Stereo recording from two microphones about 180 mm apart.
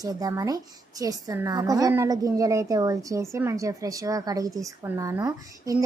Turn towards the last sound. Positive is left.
turn(degrees=-20)  # may be behind; listen again after turning